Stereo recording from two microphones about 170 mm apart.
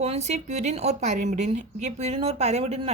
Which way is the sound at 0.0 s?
40° right (ahead or behind).